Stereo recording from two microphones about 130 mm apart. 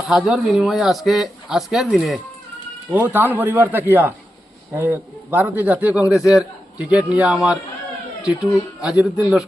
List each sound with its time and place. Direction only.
0.1 s speech: centre (ahead or behind)
2.9 s a man's voice: 15° right (ahead or behind)